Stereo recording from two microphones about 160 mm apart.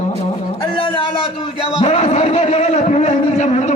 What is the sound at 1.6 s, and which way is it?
A man's voice, 40° left (ahead or behind).